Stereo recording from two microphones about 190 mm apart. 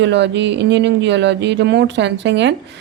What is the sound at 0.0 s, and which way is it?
Speech, 65° right (ahead or behind).